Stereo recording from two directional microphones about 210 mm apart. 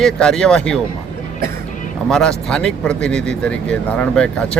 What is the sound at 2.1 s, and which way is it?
Speech, centre (ahead or behind).